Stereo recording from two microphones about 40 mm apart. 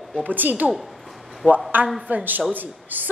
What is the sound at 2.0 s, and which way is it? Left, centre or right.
A woman's voice, right.